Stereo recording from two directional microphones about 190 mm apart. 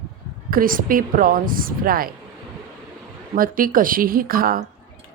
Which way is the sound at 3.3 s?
45° right (ahead or behind).